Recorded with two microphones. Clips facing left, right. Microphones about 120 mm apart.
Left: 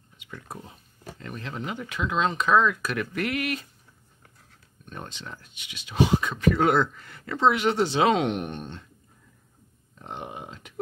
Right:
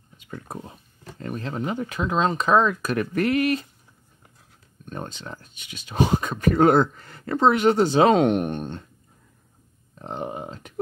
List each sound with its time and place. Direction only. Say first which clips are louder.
0.3 s speech: right 5 dB; 35° right (ahead or behind)
4.8 s speech: right 5 dB; 40° right (ahead or behind)
10.0 s a sound: right 6 dB; 40° right (ahead or behind)